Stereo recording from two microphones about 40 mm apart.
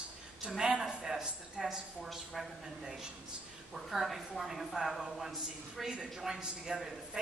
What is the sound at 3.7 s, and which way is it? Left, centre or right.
A woman's voice, centre.